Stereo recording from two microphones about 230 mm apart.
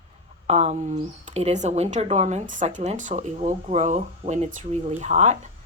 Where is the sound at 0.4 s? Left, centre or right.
Right.